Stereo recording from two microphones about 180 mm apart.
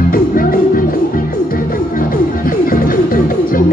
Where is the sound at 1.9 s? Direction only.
50° left (ahead or behind).